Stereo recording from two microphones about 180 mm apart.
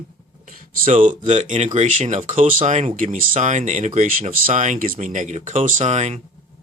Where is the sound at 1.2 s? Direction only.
40° right (ahead or behind).